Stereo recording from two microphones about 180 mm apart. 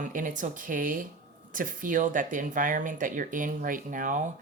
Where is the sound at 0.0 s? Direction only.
45° right (ahead or behind).